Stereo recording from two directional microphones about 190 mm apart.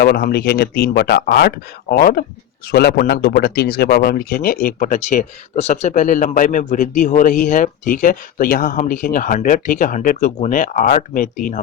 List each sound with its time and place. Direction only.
0.0 s speech: 55° left (ahead or behind)